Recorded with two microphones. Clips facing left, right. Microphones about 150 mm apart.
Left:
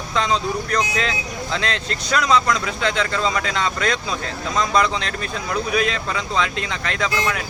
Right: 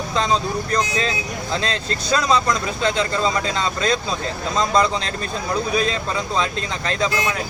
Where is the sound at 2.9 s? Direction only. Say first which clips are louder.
Right 1 dB; 15° right (ahead or behind).